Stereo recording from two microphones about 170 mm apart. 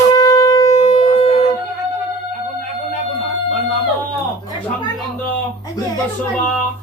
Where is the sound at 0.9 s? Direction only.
35° left (ahead or behind).